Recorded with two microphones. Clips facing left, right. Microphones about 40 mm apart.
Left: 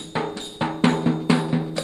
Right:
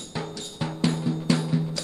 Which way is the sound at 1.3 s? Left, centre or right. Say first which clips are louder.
Left 2 dB; left.